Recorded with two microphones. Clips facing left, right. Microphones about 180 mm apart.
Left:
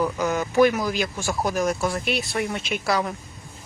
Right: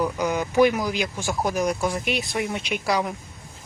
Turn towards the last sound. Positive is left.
turn(degrees=-10)  # may be behind; listen again after turning